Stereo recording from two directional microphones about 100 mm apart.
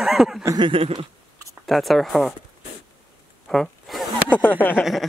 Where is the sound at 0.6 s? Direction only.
65° right (ahead or behind).